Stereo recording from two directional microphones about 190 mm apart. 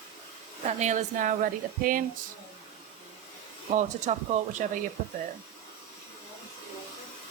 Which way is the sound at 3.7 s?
40° right (ahead or behind).